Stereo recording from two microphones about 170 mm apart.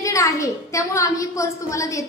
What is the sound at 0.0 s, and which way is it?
A woman's voice, 20° left (ahead or behind).